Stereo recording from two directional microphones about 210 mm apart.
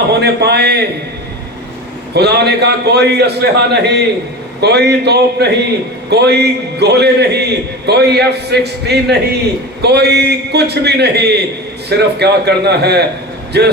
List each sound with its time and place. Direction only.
0.1 s a man's voice: 50° right (ahead or behind)
2.1 s a man's voice: 50° right (ahead or behind)